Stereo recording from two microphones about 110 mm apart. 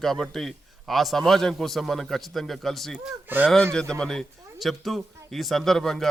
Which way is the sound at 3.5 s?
5° left (ahead or behind).